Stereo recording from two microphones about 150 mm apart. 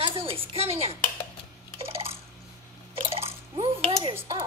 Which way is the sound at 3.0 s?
40° right (ahead or behind).